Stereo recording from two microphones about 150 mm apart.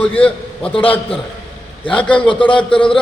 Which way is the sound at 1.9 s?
10° left (ahead or behind).